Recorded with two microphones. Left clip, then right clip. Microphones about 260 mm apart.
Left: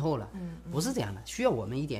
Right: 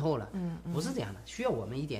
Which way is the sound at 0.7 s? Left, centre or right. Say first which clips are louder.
Left 4 dB; left.